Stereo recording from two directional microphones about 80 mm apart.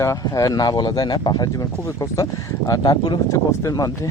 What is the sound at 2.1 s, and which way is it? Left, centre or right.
Speech, left.